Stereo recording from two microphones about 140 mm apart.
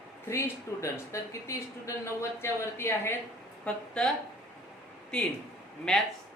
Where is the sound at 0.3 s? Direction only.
20° left (ahead or behind).